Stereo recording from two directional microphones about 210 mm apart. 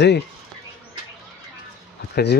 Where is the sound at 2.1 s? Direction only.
50° left (ahead or behind).